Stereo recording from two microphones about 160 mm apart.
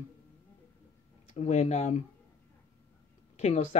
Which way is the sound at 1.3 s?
45° left (ahead or behind).